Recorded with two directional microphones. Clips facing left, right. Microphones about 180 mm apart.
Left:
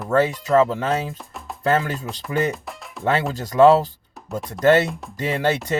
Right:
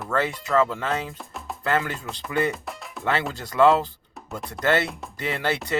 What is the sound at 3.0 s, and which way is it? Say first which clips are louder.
Speech: left 4 dB; 45° left (ahead or behind).